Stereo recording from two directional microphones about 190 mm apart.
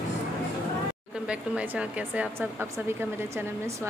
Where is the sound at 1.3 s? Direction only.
5° right (ahead or behind).